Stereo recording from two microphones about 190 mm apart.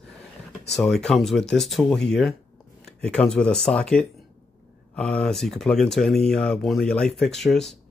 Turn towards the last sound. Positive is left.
turn(degrees=0)  # may be behind; listen again after turning